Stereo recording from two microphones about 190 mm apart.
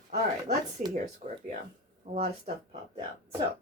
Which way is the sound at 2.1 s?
35° right (ahead or behind).